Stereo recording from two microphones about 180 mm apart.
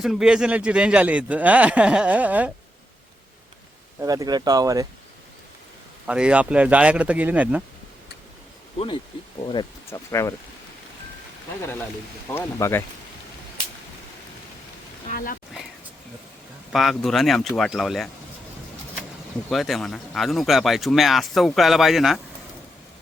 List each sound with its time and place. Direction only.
0.0 s a man's voice: centre (ahead or behind)
4.0 s speech: 20° right (ahead or behind)
6.1 s a man's voice: 5° right (ahead or behind)
9.5 s speech: 20° left (ahead or behind)
11.6 s speech: 10° left (ahead or behind)
15.0 s speech: 50° left (ahead or behind)
16.7 s speech: centre (ahead or behind)
19.5 s speech: centre (ahead or behind)